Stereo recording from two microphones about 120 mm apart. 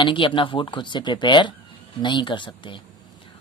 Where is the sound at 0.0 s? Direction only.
45° left (ahead or behind).